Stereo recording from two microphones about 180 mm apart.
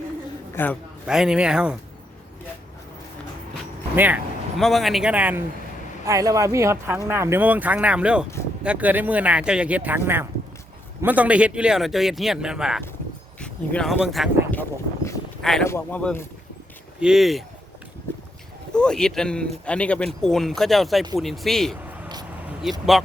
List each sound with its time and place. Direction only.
0.5 s a man's voice: 10° left (ahead or behind)
1.0 s speech: 5° right (ahead or behind)
3.9 s speech: 10° right (ahead or behind)
14.5 s a sound: 10° left (ahead or behind)
15.6 s speech: 10° left (ahead or behind)
17.0 s speech: centre (ahead or behind)
18.7 s speech: 5° left (ahead or behind)